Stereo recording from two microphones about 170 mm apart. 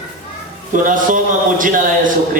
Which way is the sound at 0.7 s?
50° right (ahead or behind).